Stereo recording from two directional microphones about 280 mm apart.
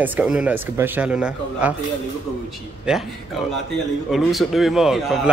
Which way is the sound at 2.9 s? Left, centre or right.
Centre.